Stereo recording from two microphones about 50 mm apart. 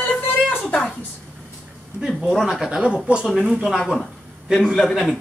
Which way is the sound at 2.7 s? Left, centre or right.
Centre.